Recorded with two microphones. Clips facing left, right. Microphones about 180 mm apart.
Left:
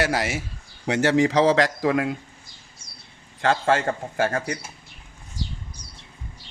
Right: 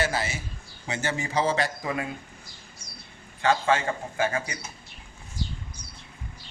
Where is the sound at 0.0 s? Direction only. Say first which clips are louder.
Left 4 dB; 90° left.